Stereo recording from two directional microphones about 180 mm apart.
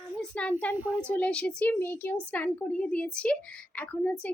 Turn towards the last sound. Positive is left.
turn(degrees=10)  # may be behind; listen again after turning